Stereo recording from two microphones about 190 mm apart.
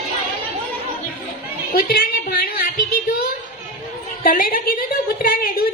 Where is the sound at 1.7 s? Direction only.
50° left (ahead or behind).